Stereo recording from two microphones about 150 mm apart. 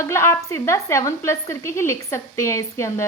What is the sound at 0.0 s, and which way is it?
A woman's voice, 20° left (ahead or behind).